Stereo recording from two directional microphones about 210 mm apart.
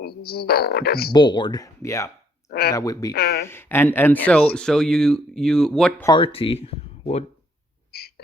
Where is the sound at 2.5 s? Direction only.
50° left (ahead or behind).